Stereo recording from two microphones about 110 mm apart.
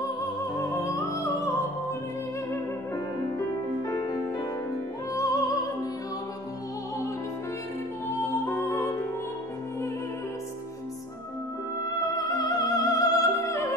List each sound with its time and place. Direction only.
0.6 s music: 25° left (ahead or behind)
3.9 s music: 35° left (ahead or behind)
8.5 s music: 25° left (ahead or behind)
12.3 s music: 35° left (ahead or behind)